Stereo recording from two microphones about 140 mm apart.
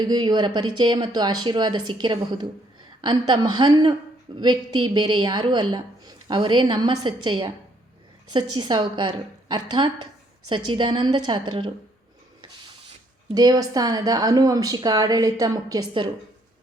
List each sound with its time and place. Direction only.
0.0 s a woman's voice: 30° right (ahead or behind)
13.3 s a woman's voice: 30° right (ahead or behind)